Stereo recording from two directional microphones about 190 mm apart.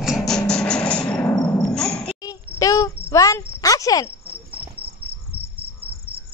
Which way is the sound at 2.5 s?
20° left (ahead or behind).